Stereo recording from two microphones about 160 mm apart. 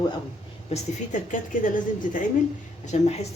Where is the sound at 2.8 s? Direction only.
45° left (ahead or behind).